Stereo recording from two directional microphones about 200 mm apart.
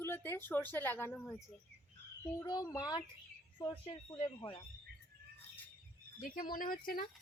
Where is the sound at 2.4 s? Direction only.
20° left (ahead or behind).